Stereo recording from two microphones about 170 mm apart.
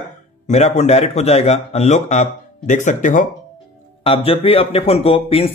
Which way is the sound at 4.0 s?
30° left (ahead or behind).